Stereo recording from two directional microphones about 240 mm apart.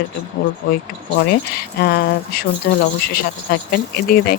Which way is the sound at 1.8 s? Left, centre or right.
Left.